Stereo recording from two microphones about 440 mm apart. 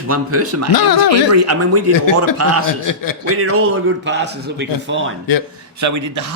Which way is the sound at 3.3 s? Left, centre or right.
Right.